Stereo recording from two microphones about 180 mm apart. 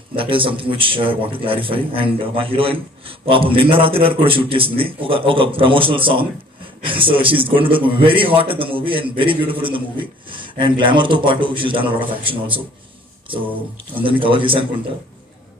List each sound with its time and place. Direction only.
0.1 s a man's voice: 30° right (ahead or behind)
14.0 s a man's voice: 30° right (ahead or behind)